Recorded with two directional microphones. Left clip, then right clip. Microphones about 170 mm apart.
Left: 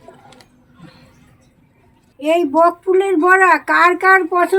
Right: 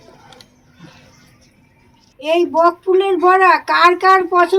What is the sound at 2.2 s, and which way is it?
A woman's voice, 40° left (ahead or behind).